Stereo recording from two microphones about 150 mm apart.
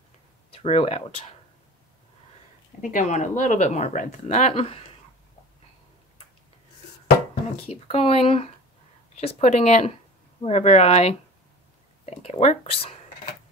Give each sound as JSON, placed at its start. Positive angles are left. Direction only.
{"t": 0.5, "sound": "speech", "side_deg": 40}
{"t": 2.8, "sound": "speech", "side_deg": 60}
{"t": 7.6, "sound": "speech", "side_deg": 40}